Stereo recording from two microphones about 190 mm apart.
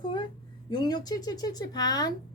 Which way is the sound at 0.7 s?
20° left (ahead or behind).